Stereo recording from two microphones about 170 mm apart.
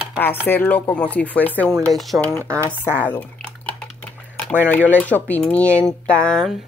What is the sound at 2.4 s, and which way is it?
Speech, 15° right (ahead or behind).